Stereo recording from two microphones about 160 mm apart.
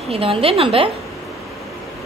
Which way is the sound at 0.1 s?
35° right (ahead or behind).